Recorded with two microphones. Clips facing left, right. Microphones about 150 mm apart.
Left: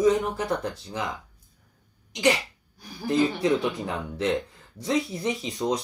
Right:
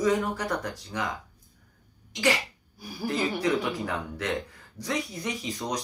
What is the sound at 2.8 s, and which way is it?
Speech, 10° right (ahead or behind).